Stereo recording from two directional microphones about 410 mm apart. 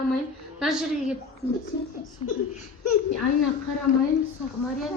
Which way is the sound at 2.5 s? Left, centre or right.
Left.